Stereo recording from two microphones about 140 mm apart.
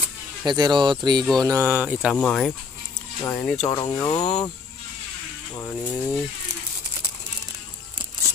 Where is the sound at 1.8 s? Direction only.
5° right (ahead or behind).